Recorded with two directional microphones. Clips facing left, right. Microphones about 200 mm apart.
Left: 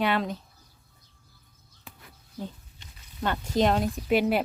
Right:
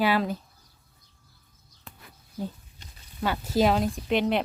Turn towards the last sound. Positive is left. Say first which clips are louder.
# left 1 dB
turn(degrees=5)  # may be behind; listen again after turning